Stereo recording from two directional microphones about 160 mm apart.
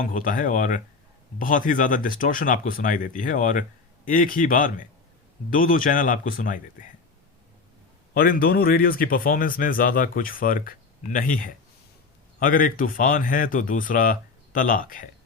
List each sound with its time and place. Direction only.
0.0 s speech: 55° left (ahead or behind)
8.1 s speech: 65° left (ahead or behind)